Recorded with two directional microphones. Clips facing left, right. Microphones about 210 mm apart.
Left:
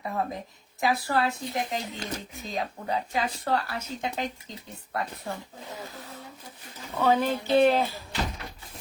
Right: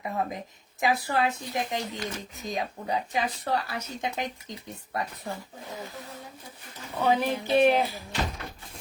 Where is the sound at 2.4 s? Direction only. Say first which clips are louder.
Right 1 dB; 15° right (ahead or behind).